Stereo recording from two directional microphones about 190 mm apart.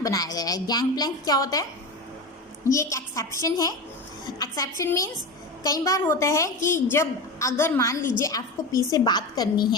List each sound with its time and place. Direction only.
0.0 s a woman's voice: 20° left (ahead or behind)
2.6 s a woman's voice: 15° left (ahead or behind)